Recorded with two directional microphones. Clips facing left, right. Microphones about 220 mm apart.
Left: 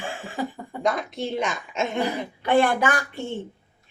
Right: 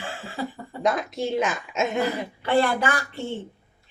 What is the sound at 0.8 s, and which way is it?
A woman's voice, 5° right (ahead or behind).